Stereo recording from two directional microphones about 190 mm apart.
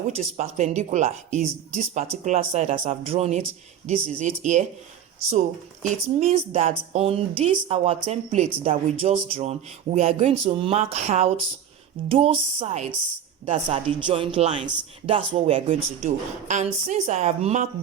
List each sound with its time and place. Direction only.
0.3 s speech: 35° right (ahead or behind)
5.8 s speech: 35° right (ahead or behind)